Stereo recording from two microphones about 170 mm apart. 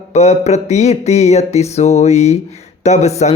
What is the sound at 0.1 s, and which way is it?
Mantra, 40° left (ahead or behind).